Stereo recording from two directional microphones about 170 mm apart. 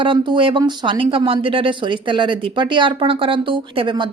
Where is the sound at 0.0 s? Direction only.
30° right (ahead or behind).